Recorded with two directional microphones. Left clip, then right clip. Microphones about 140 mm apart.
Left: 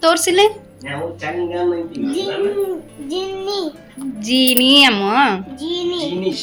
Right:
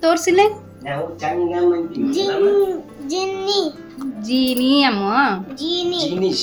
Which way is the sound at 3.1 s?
30° left (ahead or behind).